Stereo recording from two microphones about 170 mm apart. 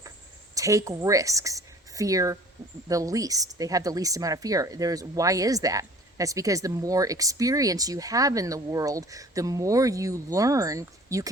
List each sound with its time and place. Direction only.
0.5 s a woman's voice: 20° right (ahead or behind)